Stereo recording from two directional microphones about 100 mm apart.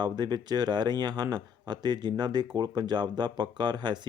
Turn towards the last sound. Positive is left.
turn(degrees=-45)  # may be behind; listen again after turning